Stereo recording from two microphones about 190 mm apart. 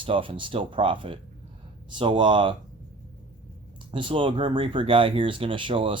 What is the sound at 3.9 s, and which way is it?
Speech, 25° right (ahead or behind).